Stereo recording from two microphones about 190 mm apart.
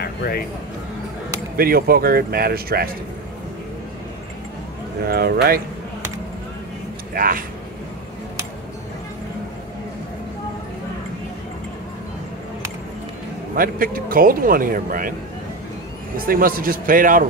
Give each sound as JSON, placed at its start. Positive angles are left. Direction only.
{"t": 0.0, "sound": "a sound", "side_deg": 55}
{"t": 1.6, "sound": "speech", "side_deg": -50}
{"t": 5.0, "sound": "speech", "side_deg": -55}
{"t": 7.2, "sound": "speech", "side_deg": -45}
{"t": 13.6, "sound": "speech", "side_deg": -45}
{"t": 16.3, "sound": "speech", "side_deg": -50}